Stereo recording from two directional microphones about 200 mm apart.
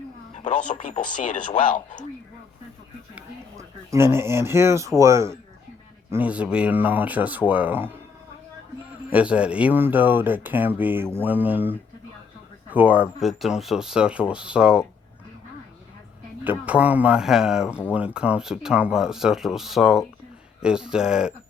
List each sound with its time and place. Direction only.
0.3 s a sound: 35° left (ahead or behind)
0.7 s speech: 40° left (ahead or behind)
3.2 s speech: 15° right (ahead or behind)
9.1 s speech: 5° right (ahead or behind)
16.4 s speech: 10° right (ahead or behind)